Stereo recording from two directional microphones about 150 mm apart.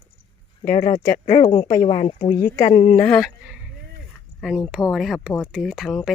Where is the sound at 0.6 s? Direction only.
60° left (ahead or behind).